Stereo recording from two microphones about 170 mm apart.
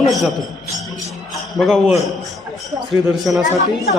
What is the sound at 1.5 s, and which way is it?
Speech, centre (ahead or behind).